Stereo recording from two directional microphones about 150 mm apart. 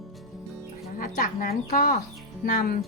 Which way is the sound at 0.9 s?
65° left (ahead or behind).